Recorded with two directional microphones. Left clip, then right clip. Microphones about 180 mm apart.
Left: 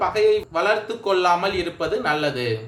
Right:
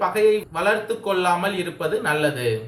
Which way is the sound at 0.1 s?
50° left (ahead or behind).